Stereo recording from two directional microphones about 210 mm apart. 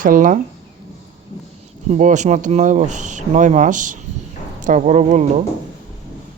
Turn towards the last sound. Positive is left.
turn(degrees=-35)  # may be behind; listen again after turning